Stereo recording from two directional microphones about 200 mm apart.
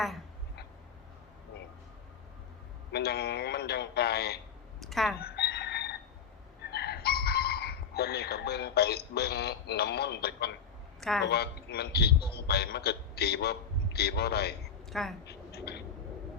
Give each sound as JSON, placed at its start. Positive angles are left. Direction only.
{"t": 2.9, "sound": "a man's voice", "side_deg": 55}
{"t": 4.8, "sound": "fowl", "side_deg": 0}
{"t": 5.2, "sound": "chicken", "side_deg": 55}
{"t": 6.6, "sound": "a man's voice", "side_deg": 55}
{"t": 14.8, "sound": "a sound", "side_deg": 0}
{"t": 15.2, "sound": "a sound", "side_deg": 55}